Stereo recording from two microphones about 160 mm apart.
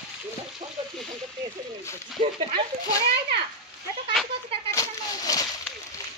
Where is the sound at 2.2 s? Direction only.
45° right (ahead or behind).